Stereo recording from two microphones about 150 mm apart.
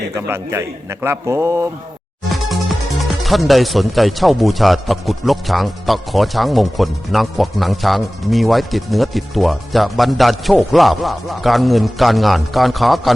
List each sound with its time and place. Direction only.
0.2 s a man's voice: 20° right (ahead or behind)
2.5 s speech: centre (ahead or behind)